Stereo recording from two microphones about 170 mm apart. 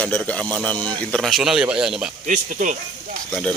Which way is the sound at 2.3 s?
50° right (ahead or behind).